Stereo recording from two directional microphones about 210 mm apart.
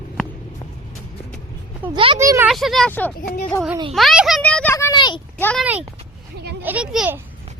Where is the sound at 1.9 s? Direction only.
20° right (ahead or behind).